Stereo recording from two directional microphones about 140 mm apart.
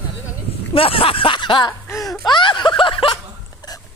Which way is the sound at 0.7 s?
40° left (ahead or behind).